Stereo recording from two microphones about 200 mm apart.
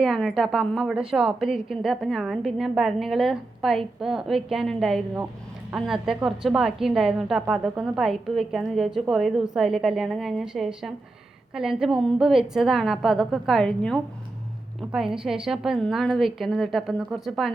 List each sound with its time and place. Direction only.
0.0 s a woman's voice: centre (ahead or behind)